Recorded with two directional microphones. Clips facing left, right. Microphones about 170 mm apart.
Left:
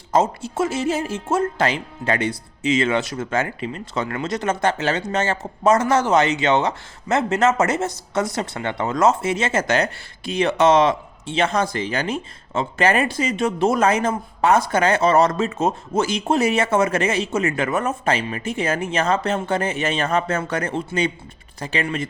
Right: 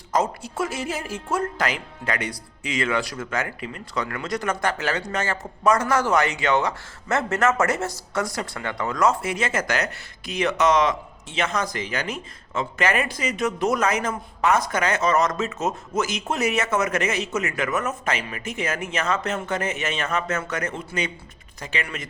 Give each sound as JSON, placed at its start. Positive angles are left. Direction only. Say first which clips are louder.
{"t": 0.1, "sound": "speech", "louder": "left 4 dB", "side_deg": 25}